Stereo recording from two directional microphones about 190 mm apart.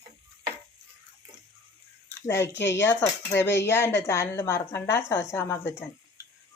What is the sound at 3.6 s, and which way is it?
A woman's voice, 10° left (ahead or behind).